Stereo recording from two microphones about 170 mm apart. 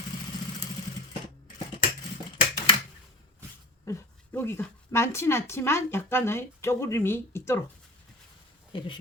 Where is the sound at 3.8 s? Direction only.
20° left (ahead or behind).